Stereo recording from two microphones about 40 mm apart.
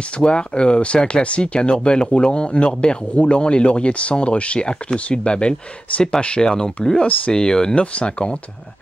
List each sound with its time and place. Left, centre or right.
0.2 s speech: left
7.7 s speech: left